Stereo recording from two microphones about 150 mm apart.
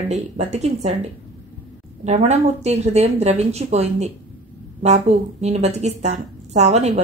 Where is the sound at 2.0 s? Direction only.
45° right (ahead or behind).